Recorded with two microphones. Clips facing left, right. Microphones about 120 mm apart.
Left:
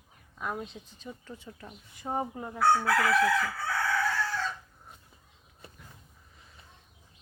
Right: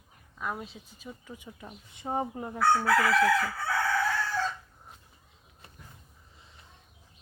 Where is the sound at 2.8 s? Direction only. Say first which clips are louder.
Right 1 dB; centre (ahead or behind).